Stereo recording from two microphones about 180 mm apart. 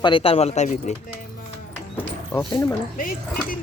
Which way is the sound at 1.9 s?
10° left (ahead or behind).